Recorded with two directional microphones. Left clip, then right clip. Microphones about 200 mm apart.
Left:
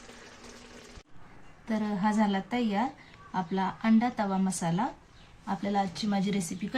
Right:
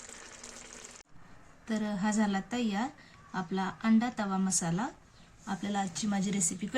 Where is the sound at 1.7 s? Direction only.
10° right (ahead or behind).